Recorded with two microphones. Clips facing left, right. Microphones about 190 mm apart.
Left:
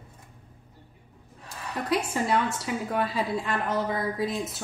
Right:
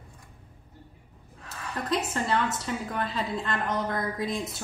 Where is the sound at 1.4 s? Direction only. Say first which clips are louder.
Left 2 dB; 10° left (ahead or behind).